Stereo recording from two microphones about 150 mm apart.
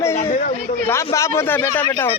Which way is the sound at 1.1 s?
20° left (ahead or behind).